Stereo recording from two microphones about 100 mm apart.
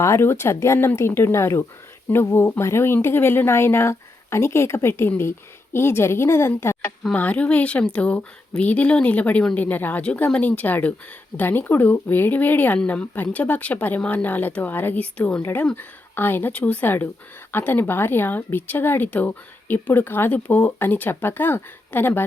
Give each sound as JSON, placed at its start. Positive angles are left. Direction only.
{"t": 0.0, "sound": "speech", "side_deg": 25}
{"t": 7.1, "sound": "a woman's voice", "side_deg": 15}